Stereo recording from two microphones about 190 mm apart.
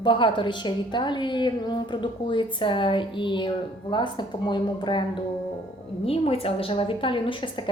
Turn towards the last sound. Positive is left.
turn(degrees=25)  # may be behind; listen again after turning